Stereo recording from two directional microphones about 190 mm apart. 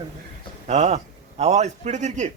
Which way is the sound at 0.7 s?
35° right (ahead or behind).